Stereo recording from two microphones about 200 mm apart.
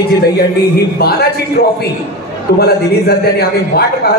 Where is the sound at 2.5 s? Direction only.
50° left (ahead or behind).